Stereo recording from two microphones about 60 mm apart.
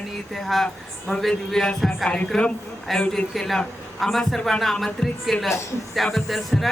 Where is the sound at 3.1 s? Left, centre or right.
Centre.